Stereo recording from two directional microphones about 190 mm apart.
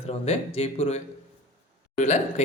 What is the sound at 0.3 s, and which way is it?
Speech, 35° left (ahead or behind).